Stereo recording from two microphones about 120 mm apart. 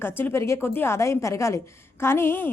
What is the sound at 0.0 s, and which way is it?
A woman's voice, 20° left (ahead or behind).